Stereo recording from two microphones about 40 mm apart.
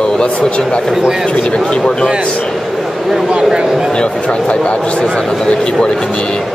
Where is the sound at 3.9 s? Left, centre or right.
Left.